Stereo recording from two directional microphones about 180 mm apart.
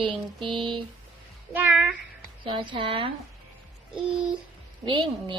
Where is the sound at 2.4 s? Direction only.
25° right (ahead or behind).